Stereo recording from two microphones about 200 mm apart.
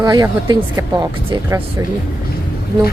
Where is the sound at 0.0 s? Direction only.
20° right (ahead or behind).